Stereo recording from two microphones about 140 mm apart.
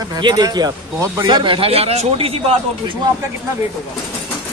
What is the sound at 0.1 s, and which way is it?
Speech, 30° right (ahead or behind).